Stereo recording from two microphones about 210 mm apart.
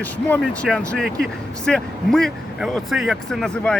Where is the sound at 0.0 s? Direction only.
5° left (ahead or behind).